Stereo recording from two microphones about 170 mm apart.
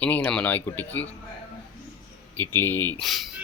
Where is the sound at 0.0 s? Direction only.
10° left (ahead or behind).